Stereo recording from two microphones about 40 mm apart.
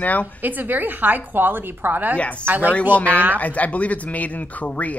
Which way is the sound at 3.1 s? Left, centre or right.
Right.